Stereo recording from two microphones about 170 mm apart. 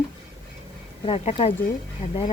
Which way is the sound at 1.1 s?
35° left (ahead or behind).